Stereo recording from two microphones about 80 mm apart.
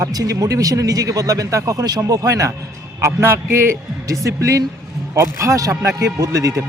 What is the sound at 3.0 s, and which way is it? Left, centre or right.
Speech, right.